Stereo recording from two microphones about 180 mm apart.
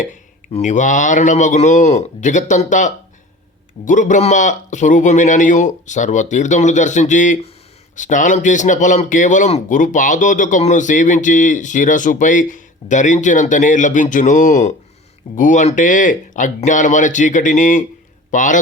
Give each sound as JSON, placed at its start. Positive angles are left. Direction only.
{"t": 0.5, "sound": "a man's voice", "side_deg": 45}